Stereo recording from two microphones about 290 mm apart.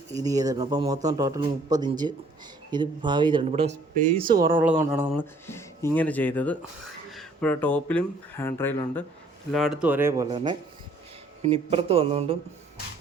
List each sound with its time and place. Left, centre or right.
0.1 s a man's voice: centre
5.2 s a man's voice: centre